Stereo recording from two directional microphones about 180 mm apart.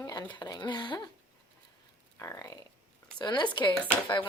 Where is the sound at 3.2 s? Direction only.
25° left (ahead or behind).